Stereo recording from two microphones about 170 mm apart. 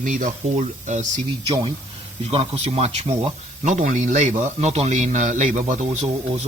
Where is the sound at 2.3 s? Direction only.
35° right (ahead or behind).